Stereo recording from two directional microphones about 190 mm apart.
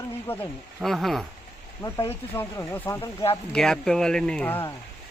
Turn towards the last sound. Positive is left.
turn(degrees=10)  # may be behind; listen again after turning